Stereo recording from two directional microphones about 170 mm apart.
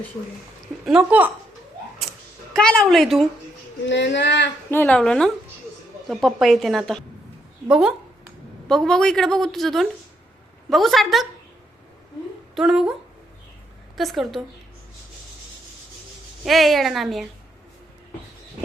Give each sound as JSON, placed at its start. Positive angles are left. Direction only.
{"t": 0.9, "sound": "speech", "side_deg": -5}
{"t": 2.5, "sound": "a woman's voice", "side_deg": 5}
{"t": 3.8, "sound": "speech", "side_deg": 90}
{"t": 4.7, "sound": "a woman's voice", "side_deg": 10}
{"t": 12.5, "sound": "a woman's voice", "side_deg": -5}
{"t": 16.4, "sound": "a woman's voice", "side_deg": 0}